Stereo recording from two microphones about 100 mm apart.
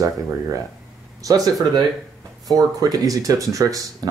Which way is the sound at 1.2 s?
35° right (ahead or behind).